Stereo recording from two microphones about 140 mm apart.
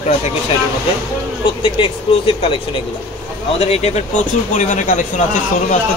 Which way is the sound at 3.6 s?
50° left (ahead or behind).